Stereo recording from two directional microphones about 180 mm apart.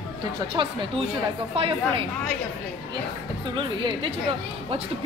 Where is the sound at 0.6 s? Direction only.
25° right (ahead or behind).